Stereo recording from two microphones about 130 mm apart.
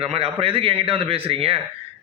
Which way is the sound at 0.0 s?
50° right (ahead or behind).